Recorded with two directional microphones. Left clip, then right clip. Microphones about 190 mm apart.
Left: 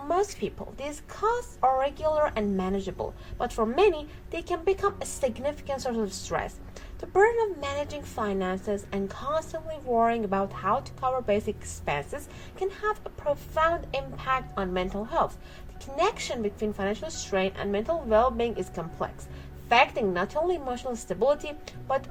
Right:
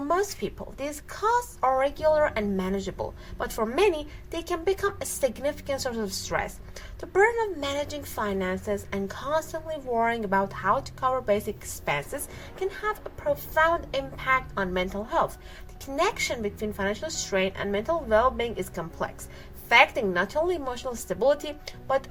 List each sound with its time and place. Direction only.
0.1 s a woman's voice: 30° right (ahead or behind)
7.6 s a woman's voice: 30° right (ahead or behind)